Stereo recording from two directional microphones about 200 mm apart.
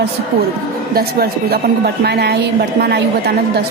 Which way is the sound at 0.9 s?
50° right (ahead or behind).